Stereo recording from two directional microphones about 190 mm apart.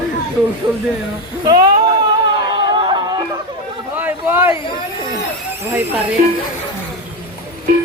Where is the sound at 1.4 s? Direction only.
20° right (ahead or behind).